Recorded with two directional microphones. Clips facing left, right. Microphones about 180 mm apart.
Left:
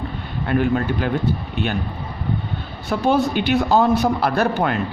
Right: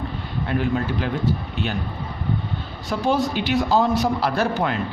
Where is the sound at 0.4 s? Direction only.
55° left (ahead or behind).